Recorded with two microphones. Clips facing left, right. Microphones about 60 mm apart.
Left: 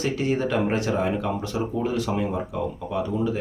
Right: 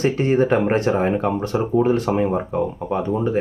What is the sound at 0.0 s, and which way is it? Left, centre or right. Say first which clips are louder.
Speech: right 6 dB; right.